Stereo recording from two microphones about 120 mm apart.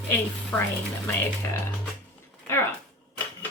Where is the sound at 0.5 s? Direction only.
15° left (ahead or behind).